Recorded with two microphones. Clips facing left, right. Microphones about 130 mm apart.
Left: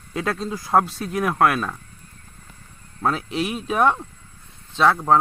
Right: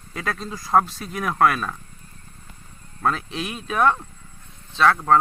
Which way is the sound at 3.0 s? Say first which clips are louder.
Left 2 dB; 5° left (ahead or behind).